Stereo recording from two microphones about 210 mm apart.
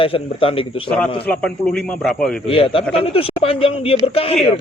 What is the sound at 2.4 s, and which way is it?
A man's voice, 25° left (ahead or behind).